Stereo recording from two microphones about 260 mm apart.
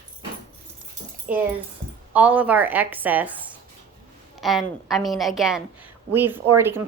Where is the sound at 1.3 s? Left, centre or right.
Centre.